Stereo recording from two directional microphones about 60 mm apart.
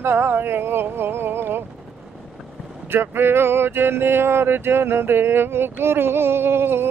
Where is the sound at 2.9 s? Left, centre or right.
Right.